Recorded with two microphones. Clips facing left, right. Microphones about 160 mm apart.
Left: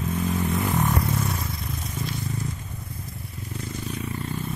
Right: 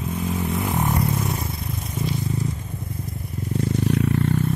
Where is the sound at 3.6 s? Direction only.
70° right (ahead or behind).